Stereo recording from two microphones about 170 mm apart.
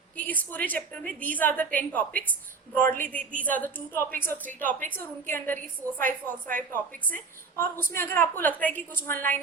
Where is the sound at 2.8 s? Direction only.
55° right (ahead or behind).